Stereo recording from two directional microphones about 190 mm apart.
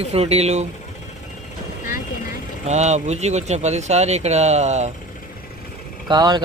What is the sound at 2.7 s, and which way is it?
Speech, 35° right (ahead or behind).